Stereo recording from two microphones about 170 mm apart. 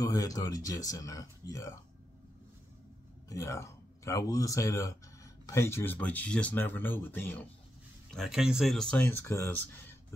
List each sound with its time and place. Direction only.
0.0 s speech: 20° left (ahead or behind)
3.3 s speech: 20° left (ahead or behind)